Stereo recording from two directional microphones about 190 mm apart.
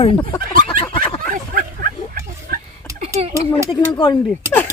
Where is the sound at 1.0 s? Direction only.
50° right (ahead or behind).